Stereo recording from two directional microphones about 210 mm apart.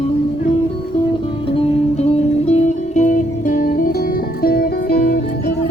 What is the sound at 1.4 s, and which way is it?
Music, 25° left (ahead or behind).